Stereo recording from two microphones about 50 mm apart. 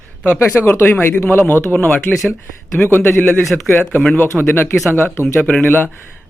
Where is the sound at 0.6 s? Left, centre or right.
Left.